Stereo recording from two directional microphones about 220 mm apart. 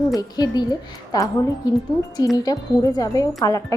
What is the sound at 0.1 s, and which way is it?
Speech, 15° left (ahead or behind).